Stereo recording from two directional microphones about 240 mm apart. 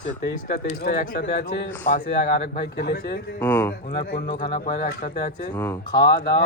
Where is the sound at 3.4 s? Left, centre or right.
Centre.